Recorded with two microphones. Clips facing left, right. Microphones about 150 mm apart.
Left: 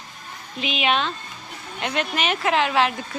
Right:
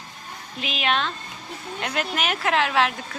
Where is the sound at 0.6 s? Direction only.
Centre (ahead or behind).